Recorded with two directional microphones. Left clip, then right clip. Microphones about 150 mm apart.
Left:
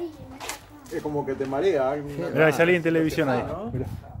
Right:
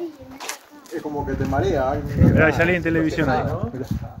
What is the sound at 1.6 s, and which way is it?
Speech, 35° right (ahead or behind).